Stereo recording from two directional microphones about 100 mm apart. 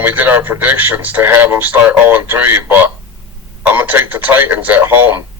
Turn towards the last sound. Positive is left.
turn(degrees=-20)  # may be behind; listen again after turning